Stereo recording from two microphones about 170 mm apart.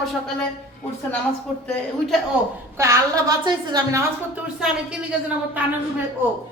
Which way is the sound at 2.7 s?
15° right (ahead or behind).